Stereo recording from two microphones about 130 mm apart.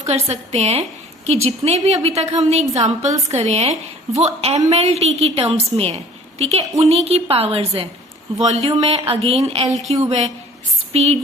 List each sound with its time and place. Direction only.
0.0 s a woman's voice: 55° right (ahead or behind)